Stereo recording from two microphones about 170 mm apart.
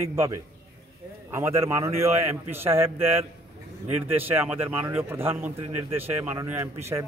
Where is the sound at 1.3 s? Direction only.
15° right (ahead or behind).